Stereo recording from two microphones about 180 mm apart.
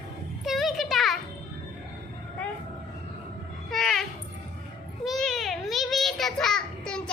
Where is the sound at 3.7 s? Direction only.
Centre (ahead or behind).